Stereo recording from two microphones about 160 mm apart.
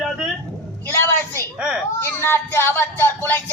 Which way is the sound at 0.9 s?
15° left (ahead or behind).